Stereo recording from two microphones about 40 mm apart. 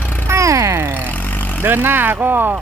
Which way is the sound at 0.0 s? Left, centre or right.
Left.